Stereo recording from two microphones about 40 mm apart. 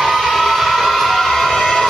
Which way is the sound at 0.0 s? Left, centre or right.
Centre.